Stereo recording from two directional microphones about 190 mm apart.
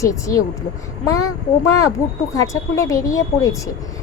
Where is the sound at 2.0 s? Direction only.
15° left (ahead or behind).